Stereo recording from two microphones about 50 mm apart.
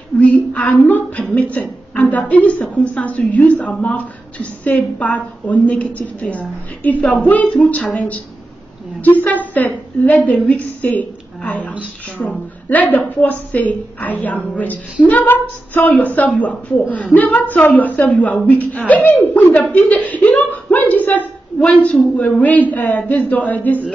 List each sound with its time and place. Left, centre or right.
0.2 s a sound: left
1.3 s a woman's voice: left
7.6 s speech: left
9.0 s a woman's voice: left